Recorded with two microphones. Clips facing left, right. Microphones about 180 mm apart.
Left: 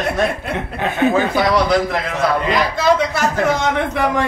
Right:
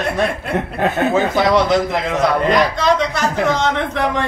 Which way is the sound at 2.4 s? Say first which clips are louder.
Right 1 dB; 5° left (ahead or behind).